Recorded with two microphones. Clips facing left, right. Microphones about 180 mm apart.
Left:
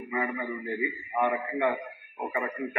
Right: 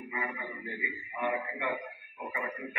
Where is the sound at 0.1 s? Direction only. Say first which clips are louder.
Left 9 dB; 50° left (ahead or behind).